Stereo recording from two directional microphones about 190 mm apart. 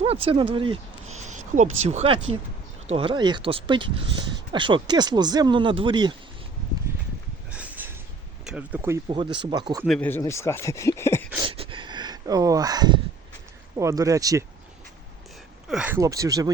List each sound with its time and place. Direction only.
0.0 s speech: 30° right (ahead or behind)
1.2 s speech: 40° right (ahead or behind); by 6.1 s 25° right (ahead or behind)
7.5 s a sound: 5° right (ahead or behind)
8.4 s speech: 5° right (ahead or behind)
9.0 s speech: 25° right (ahead or behind)
9.8 s speech: centre (ahead or behind)
10.1 s speech: 15° left (ahead or behind)
11.3 s a sound: 30° right (ahead or behind)
13.7 s speech: 15° right (ahead or behind)
15.7 s speech: 5° right (ahead or behind)
16.0 s speech: 15° right (ahead or behind)